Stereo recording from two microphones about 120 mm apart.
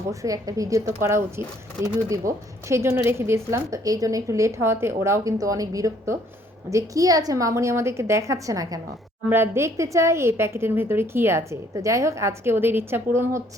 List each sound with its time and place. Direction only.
0.1 s speech: 25° right (ahead or behind)